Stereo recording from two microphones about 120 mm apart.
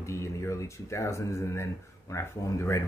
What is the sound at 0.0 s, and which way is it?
Speech, 25° left (ahead or behind).